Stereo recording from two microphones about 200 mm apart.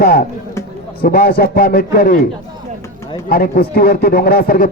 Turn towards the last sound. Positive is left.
turn(degrees=45)  # may be behind; listen again after turning